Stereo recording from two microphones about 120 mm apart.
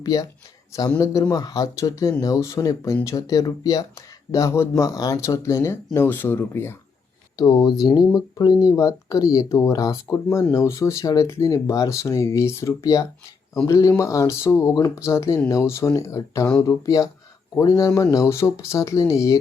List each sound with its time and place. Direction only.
0.0 s speech: 30° left (ahead or behind)
7.3 s speech: 35° left (ahead or behind)